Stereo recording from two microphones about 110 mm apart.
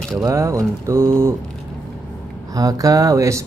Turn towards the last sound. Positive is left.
turn(degrees=-30)  # may be behind; listen again after turning